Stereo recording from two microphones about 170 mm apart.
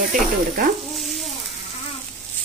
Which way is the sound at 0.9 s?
Centre (ahead or behind).